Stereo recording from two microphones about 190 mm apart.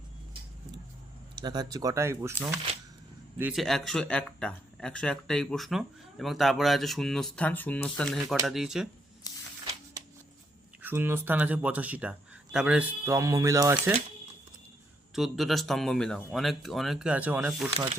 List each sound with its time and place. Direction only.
1.4 s speech: 20° right (ahead or behind); by 8.9 s centre (ahead or behind)
9.2 s a sound: 20° left (ahead or behind)
10.8 s speech: 10° right (ahead or behind)
15.1 s speech: centre (ahead or behind)